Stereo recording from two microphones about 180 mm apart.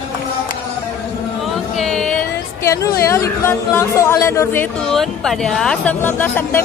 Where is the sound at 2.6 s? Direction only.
15° left (ahead or behind).